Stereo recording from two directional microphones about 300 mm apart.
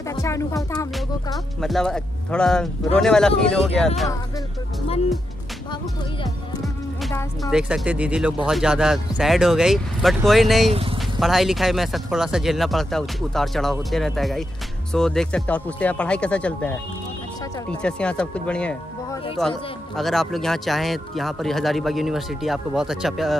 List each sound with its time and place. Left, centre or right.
0.1 s speech: centre
0.9 s speech: centre
6.6 s music: centre
7.5 s speech: centre
10.7 s speech: centre
11.1 s speech: centre